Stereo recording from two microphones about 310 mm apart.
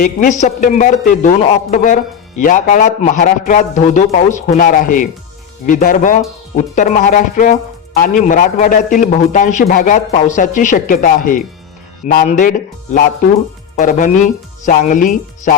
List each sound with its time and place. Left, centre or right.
0.0 s speech: left